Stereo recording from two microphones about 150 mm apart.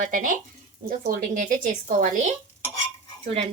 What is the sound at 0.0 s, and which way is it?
A woman's voice, 65° right (ahead or behind).